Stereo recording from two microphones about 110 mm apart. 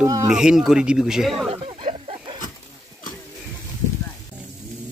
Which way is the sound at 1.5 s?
50° right (ahead or behind).